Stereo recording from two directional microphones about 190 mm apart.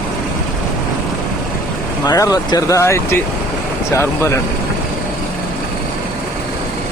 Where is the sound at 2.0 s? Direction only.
20° left (ahead or behind).